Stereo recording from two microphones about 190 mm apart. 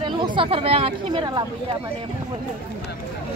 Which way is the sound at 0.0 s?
25° right (ahead or behind).